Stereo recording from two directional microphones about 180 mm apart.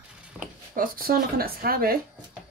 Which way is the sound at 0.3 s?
10° right (ahead or behind).